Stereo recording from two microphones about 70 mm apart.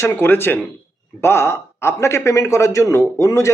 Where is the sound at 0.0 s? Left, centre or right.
Left.